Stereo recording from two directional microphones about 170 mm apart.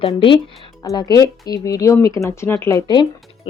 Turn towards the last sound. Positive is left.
turn(degrees=20)  # may be behind; listen again after turning